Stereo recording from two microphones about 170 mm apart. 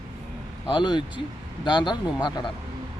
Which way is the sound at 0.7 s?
25° left (ahead or behind).